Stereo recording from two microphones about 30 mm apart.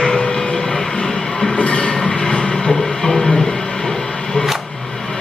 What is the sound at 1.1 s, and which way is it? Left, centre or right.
Train, left.